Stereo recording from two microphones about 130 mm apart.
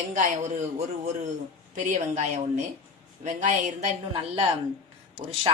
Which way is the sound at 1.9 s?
70° right (ahead or behind).